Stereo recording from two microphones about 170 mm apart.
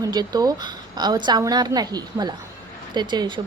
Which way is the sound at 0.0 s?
25° right (ahead or behind).